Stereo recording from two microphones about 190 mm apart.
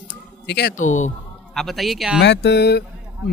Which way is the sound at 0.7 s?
40° left (ahead or behind).